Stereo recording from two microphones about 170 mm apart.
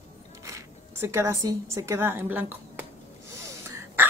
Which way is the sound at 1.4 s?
15° right (ahead or behind).